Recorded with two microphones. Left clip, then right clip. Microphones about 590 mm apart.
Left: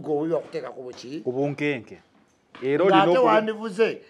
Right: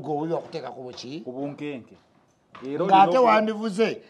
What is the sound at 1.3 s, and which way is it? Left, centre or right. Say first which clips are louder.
Speech: left 9 dB; left.